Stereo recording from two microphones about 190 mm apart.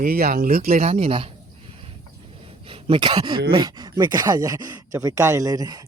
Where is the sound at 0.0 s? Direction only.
50° right (ahead or behind).